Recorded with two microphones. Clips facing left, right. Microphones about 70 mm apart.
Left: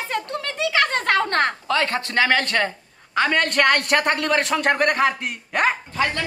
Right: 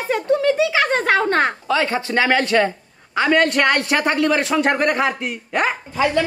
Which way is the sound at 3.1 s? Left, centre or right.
Centre.